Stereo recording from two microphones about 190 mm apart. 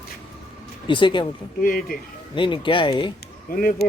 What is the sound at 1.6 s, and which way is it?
Speech, 45° left (ahead or behind).